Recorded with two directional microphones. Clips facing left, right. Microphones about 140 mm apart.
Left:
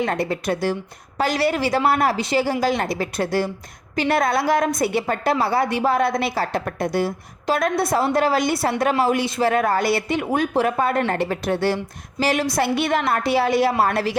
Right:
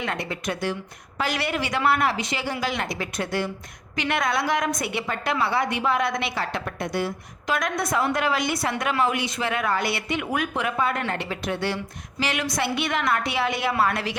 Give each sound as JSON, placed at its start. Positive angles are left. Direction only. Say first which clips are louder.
{"t": 0.0, "sound": "a woman's voice", "louder": "left 7 dB", "side_deg": 40}